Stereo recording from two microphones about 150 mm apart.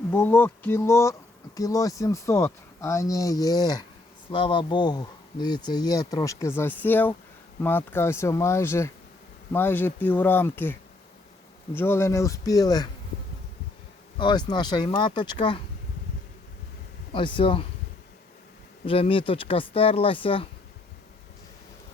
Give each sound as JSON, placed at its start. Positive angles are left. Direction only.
{"t": 0.1, "sound": "speech", "side_deg": 15}
{"t": 14.2, "sound": "speech", "side_deg": 30}
{"t": 17.1, "sound": "speech", "side_deg": 35}
{"t": 18.9, "sound": "speech", "side_deg": 35}